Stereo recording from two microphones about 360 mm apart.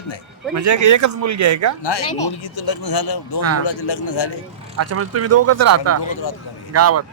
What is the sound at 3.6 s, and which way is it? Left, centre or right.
Speech, left.